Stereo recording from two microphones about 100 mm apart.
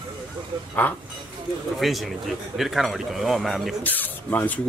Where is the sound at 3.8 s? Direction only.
15° left (ahead or behind).